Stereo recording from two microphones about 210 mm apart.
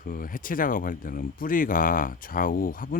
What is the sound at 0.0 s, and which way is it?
Speech, 40° left (ahead or behind).